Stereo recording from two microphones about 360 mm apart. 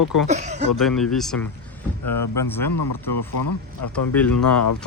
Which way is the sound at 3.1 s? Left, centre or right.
Left.